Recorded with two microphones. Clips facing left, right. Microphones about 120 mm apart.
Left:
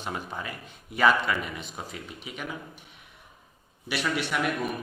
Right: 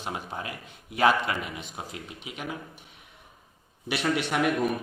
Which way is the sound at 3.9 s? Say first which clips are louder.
Right 2 dB; 55° right (ahead or behind).